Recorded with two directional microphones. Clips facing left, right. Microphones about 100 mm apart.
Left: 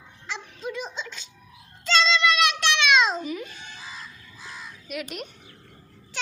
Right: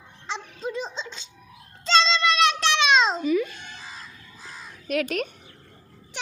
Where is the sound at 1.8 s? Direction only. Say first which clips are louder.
Right 1 dB; 30° right (ahead or behind).